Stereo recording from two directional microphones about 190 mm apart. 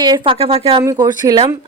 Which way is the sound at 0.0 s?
25° right (ahead or behind).